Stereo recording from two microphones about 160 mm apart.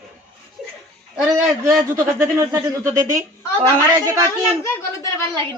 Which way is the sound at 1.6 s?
20° right (ahead or behind).